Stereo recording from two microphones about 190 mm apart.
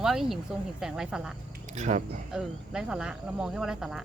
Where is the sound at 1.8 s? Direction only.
40° right (ahead or behind).